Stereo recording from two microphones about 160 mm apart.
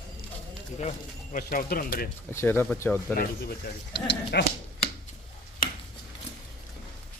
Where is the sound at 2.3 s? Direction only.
15° left (ahead or behind).